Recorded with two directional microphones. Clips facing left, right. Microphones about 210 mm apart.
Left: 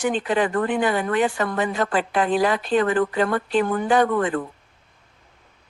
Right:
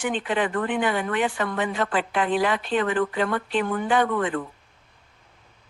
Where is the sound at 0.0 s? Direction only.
40° left (ahead or behind).